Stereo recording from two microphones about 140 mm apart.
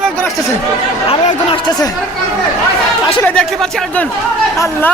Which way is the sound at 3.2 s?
5° left (ahead or behind).